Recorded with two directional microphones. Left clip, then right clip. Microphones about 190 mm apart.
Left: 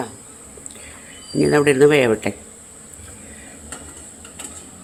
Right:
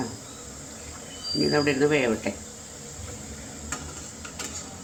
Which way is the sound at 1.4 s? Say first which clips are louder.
Left 9 dB; 70° left (ahead or behind).